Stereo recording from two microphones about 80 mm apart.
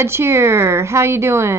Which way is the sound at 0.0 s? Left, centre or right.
Right.